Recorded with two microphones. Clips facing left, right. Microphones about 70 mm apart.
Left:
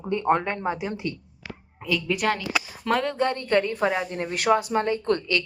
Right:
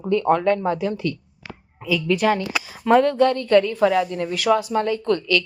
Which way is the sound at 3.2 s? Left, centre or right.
Left.